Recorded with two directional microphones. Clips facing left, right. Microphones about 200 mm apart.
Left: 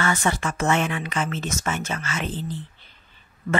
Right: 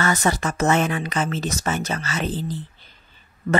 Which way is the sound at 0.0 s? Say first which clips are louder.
Right 2 dB; 40° right (ahead or behind).